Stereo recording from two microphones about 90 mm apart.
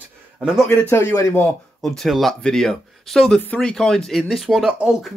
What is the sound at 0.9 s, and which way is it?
Speech, 30° left (ahead or behind).